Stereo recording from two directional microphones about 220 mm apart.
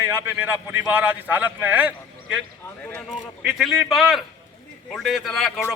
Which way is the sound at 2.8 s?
5° left (ahead or behind).